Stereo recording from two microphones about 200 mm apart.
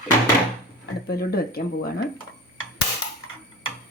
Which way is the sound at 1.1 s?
50° left (ahead or behind).